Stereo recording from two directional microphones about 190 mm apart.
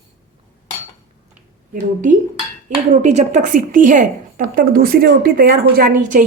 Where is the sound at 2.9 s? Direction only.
40° right (ahead or behind).